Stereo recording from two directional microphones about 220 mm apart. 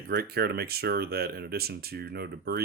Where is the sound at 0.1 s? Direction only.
45° right (ahead or behind).